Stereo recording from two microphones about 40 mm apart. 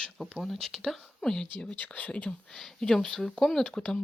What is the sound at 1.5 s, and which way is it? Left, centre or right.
Speech, left.